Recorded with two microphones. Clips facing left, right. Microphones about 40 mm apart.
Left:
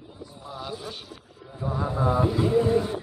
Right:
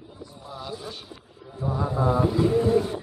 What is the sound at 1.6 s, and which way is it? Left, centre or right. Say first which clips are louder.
Chant: right 1 dB; centre.